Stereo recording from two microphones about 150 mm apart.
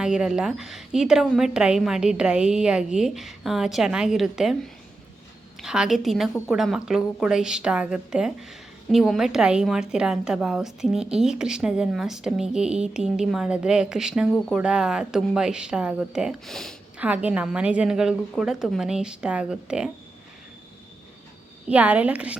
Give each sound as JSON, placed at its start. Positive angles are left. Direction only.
{"t": 0.0, "sound": "a woman's voice", "side_deg": -5}
{"t": 5.6, "sound": "a woman's voice", "side_deg": -5}
{"t": 17.0, "sound": "a woman's voice", "side_deg": -10}
{"t": 21.7, "sound": "a woman's voice", "side_deg": -10}